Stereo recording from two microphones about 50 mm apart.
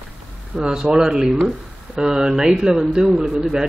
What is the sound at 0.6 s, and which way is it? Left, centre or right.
A man's voice, right.